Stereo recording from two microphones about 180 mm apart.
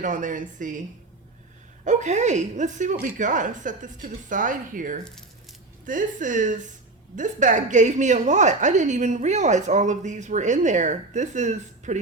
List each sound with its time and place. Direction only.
0.0 s speech: 45° right (ahead or behind)
1.8 s a woman's voice: 40° right (ahead or behind)